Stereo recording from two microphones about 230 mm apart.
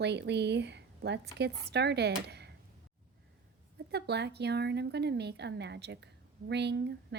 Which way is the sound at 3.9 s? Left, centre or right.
Right.